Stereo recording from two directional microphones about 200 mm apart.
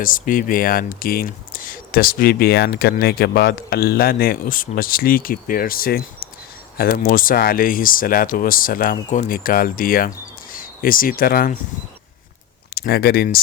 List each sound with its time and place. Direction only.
0.0 s speech: 40° left (ahead or behind)
12.7 s speech: 50° left (ahead or behind)